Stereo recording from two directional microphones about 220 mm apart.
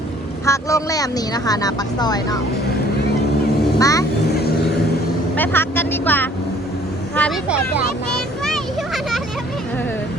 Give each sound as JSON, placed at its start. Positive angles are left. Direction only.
{"t": 0.4, "sound": "speech", "side_deg": 15}
{"t": 3.8, "sound": "speech", "side_deg": 15}
{"t": 4.3, "sound": "vehicle", "side_deg": 45}
{"t": 5.4, "sound": "speech", "side_deg": 10}
{"t": 8.4, "sound": "a sound", "side_deg": 0}